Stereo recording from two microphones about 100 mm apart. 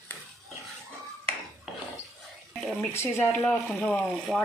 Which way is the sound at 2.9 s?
25° left (ahead or behind).